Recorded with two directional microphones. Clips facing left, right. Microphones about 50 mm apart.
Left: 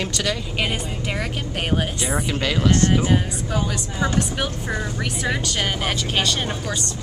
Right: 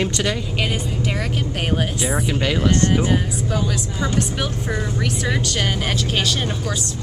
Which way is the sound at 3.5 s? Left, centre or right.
Centre.